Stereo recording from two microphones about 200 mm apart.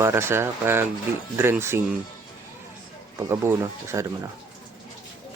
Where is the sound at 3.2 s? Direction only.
15° right (ahead or behind).